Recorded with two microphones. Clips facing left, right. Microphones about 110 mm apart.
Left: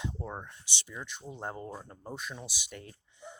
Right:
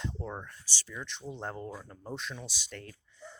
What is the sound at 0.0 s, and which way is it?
Speech, 10° left (ahead or behind).